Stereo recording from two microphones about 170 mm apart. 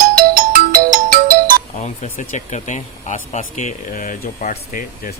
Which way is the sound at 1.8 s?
45° left (ahead or behind).